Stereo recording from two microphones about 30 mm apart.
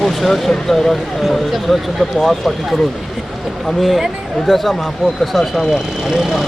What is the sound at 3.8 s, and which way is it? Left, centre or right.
Speech, centre.